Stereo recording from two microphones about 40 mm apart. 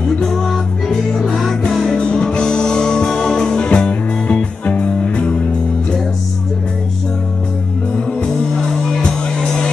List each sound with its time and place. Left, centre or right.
0.2 s music: centre
2.0 s music: left
8.2 s music: centre